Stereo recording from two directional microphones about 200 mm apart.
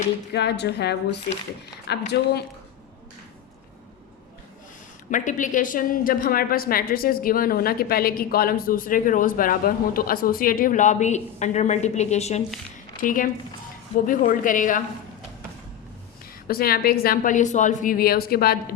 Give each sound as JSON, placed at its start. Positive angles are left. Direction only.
{"t": 0.3, "sound": "a woman's voice", "side_deg": 55}
{"t": 5.1, "sound": "a woman's voice", "side_deg": 40}
{"t": 16.5, "sound": "a woman's voice", "side_deg": 50}